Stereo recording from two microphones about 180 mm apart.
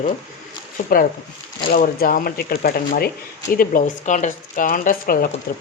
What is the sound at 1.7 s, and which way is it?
Speech, 50° left (ahead or behind).